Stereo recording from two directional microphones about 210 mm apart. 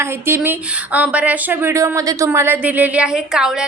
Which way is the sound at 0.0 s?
10° right (ahead or behind).